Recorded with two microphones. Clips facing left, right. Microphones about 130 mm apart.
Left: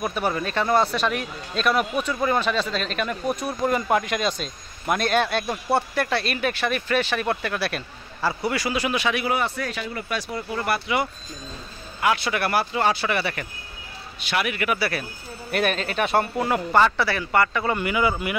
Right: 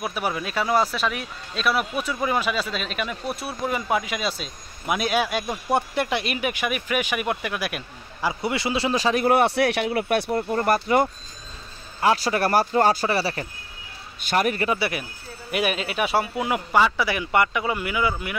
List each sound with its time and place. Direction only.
0.0 s a man's voice: 5° right (ahead or behind)
8.4 s speech: 25° right (ahead or behind)
9.3 s speech: 65° right (ahead or behind)
10.6 s speech: 45° right (ahead or behind)
14.2 s speech: 40° right (ahead or behind)
14.7 s speech: 20° right (ahead or behind)
15.5 s a man's voice: 10° right (ahead or behind)